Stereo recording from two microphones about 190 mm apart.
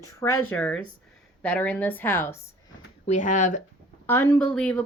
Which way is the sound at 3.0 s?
40° left (ahead or behind).